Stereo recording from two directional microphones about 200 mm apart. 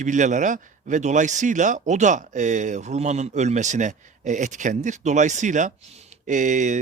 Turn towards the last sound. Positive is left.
turn(degrees=-40)  # may be behind; listen again after turning